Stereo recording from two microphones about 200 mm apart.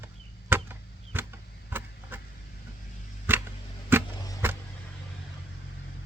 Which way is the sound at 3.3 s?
10° right (ahead or behind).